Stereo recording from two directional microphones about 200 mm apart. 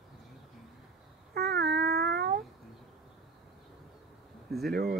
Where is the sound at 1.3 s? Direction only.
55° right (ahead or behind).